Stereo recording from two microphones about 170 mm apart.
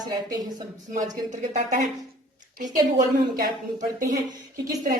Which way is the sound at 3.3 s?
55° right (ahead or behind).